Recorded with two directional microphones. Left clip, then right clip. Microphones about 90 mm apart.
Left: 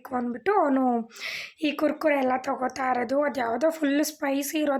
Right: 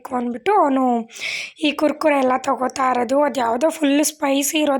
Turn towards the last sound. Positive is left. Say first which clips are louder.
# right 8 dB
turn(degrees=-30)  # may be behind; listen again after turning